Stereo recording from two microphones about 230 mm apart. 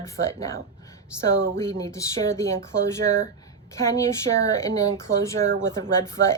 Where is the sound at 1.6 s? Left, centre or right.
Centre.